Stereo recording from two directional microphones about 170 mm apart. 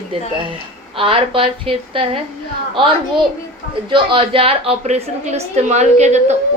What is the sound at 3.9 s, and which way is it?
A woman's voice, 30° right (ahead or behind).